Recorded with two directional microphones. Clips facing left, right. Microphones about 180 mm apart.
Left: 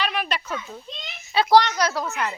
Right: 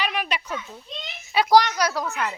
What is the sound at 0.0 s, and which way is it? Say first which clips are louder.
A child's voice: left 1 dB; 10° right (ahead or behind).